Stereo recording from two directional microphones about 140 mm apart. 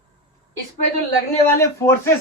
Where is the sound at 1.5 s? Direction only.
20° left (ahead or behind).